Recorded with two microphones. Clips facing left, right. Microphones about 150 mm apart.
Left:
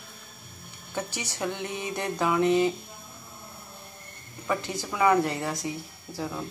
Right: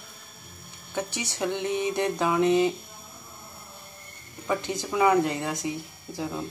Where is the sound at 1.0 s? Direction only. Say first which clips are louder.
Right 2 dB; 20° right (ahead or behind).